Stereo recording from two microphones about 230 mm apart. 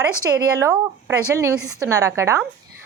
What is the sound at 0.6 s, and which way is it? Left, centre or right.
A woman's voice, centre.